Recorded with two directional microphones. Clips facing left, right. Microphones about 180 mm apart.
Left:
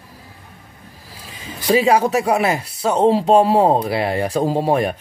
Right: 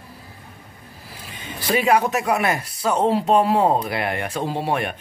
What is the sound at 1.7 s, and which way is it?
Speech, 30° left (ahead or behind).